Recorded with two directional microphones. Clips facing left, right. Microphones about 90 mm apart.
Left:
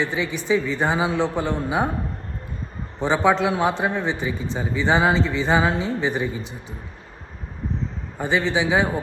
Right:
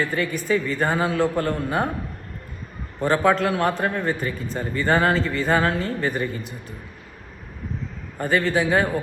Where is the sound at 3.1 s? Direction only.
25° left (ahead or behind).